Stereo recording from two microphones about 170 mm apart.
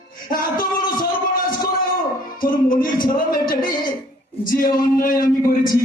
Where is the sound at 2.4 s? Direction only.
55° left (ahead or behind).